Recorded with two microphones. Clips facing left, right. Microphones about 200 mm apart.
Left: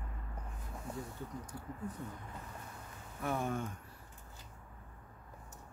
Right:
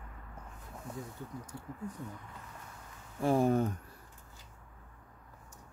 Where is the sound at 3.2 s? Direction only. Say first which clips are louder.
Right 9 dB; 30° right (ahead or behind).